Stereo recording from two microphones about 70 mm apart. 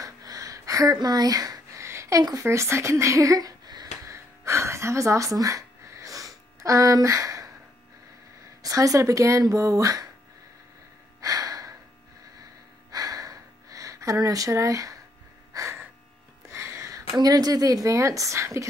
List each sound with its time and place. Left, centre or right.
0.0 s a sound: right
0.9 s speech: right
1.8 s a sound: right
2.3 s speech: right
4.1 s gasp: right
8.6 s a woman's voice: right
11.1 s gasp: right
12.9 s a sound: right
14.5 s speech: right
15.5 s a sound: right
16.4 s music: right
17.2 s speech: right